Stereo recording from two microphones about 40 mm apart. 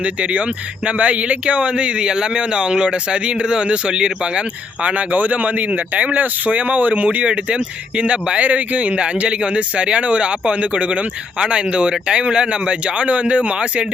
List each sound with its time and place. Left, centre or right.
0.0 s speech: right